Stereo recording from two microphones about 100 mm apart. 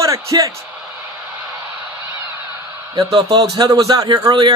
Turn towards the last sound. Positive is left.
turn(degrees=-45)  # may be behind; listen again after turning